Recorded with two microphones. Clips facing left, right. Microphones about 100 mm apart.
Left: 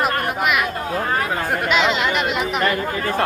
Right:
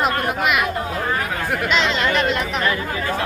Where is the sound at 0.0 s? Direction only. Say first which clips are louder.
Even; centre (ahead or behind).